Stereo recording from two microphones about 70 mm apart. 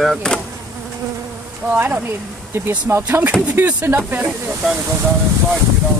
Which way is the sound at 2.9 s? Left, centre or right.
Right.